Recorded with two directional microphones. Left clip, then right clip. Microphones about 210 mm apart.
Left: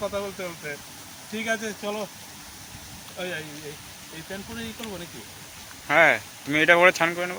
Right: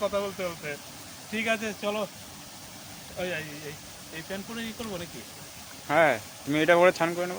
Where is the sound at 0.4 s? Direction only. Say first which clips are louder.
Even; 15° right (ahead or behind).